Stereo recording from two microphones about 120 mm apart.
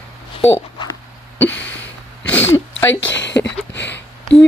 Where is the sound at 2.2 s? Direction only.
15° left (ahead or behind).